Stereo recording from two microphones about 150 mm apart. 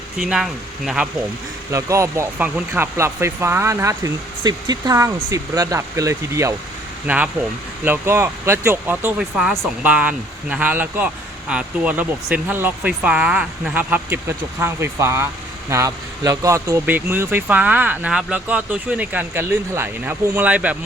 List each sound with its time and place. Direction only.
0.2 s speech: centre (ahead or behind)
1.7 s speech: 20° right (ahead or behind)